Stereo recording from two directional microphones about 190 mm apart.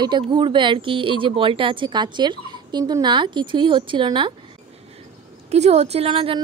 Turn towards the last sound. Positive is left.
turn(degrees=-30)  # may be behind; listen again after turning